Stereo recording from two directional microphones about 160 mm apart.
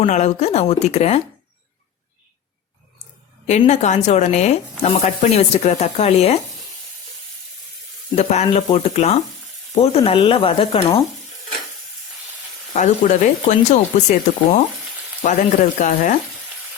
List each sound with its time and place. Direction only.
0.0 s speech: 45° left (ahead or behind)
3.7 s speech: 45° left (ahead or behind)
8.1 s speech: 45° left (ahead or behind)
12.7 s speech: 50° left (ahead or behind)